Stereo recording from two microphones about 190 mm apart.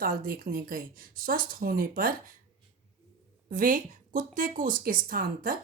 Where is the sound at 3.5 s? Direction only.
45° right (ahead or behind).